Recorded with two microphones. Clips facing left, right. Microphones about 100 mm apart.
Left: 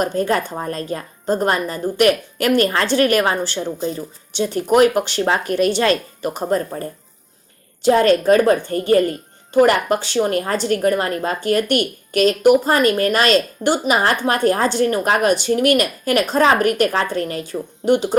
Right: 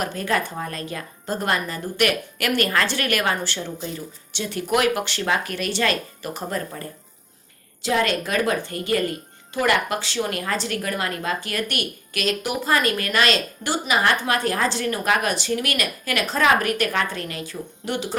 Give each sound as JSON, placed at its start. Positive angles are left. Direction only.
{"t": 0.0, "sound": "a woman's voice", "side_deg": 35}
{"t": 7.9, "sound": "a woman's voice", "side_deg": 35}